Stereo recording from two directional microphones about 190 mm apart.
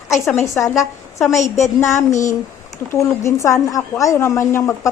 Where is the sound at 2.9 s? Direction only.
15° left (ahead or behind).